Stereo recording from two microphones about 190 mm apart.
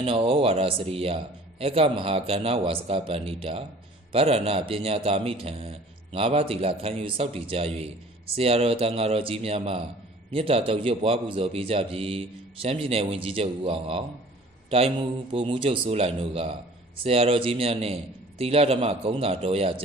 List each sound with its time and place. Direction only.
0.0 s a man's voice: 30° right (ahead or behind)